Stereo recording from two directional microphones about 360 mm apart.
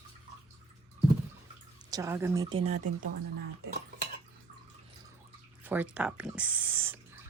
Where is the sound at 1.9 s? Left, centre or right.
Centre.